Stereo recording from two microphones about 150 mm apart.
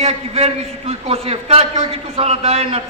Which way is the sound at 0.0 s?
45° right (ahead or behind).